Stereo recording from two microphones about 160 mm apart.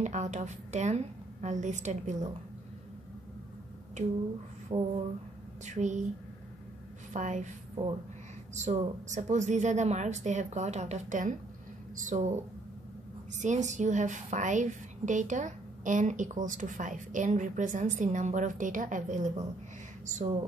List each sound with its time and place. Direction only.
0.0 s a woman's voice: 45° right (ahead or behind)
4.0 s a woman's voice: 45° right (ahead or behind)
4.6 s a sound: 40° right (ahead or behind)
5.7 s a woman's voice: 50° right (ahead or behind)
7.1 s a woman's voice: 50° right (ahead or behind)
13.4 s a woman's voice: 50° right (ahead or behind)